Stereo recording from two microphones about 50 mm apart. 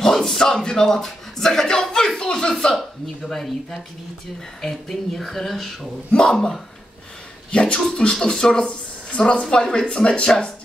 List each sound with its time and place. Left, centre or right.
0.0 s speech: centre